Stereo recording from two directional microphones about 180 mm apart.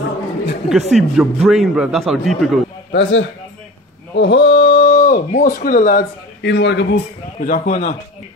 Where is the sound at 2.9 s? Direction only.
80° left.